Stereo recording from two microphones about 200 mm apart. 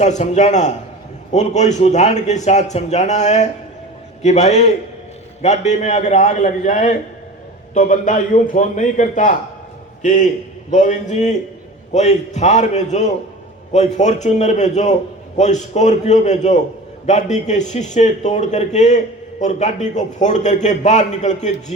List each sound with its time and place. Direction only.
0.0 s a man's voice: 35° left (ahead or behind)